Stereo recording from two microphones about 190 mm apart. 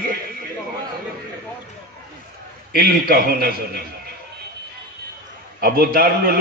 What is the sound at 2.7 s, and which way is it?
Speech, 50° right (ahead or behind).